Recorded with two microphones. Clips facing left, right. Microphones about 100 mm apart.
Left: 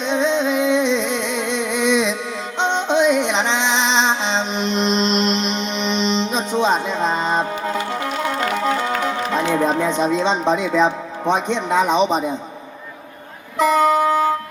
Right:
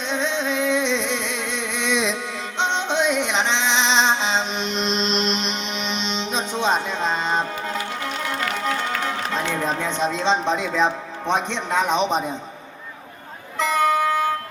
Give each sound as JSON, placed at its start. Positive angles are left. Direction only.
{"t": 0.0, "sound": "a sound", "side_deg": 0}
{"t": 2.6, "sound": "music", "side_deg": 0}
{"t": 8.4, "sound": "music", "side_deg": 25}
{"t": 9.0, "sound": "music", "side_deg": 15}
{"t": 9.6, "sound": "music", "side_deg": 25}
{"t": 9.8, "sound": "speech", "side_deg": 10}
{"t": 13.6, "sound": "music", "side_deg": 20}